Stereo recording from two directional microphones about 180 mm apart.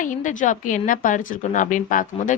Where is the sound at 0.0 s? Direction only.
45° left (ahead or behind).